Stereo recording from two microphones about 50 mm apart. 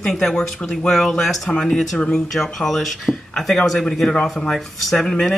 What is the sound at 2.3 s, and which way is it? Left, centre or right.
Speech, centre.